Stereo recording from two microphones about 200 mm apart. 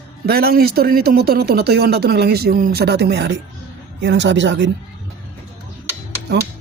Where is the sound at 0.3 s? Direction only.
50° right (ahead or behind).